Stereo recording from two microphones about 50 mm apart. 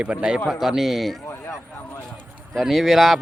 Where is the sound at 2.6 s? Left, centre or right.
Centre.